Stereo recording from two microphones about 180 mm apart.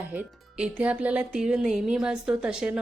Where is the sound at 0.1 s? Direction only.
5° right (ahead or behind).